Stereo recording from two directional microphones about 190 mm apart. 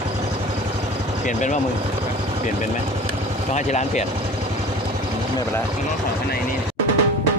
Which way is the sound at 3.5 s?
40° left (ahead or behind).